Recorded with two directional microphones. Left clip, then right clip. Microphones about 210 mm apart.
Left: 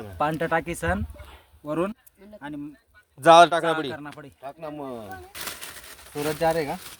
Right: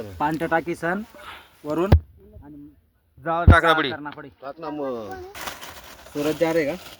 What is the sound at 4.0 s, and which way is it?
A man's voice, 45° left (ahead or behind).